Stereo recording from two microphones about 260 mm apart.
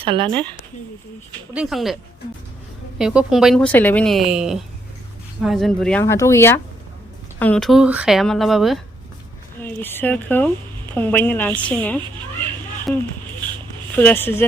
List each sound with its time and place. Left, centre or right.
0.0 s speech: right
1.5 s a woman's voice: centre
3.0 s a woman's voice: centre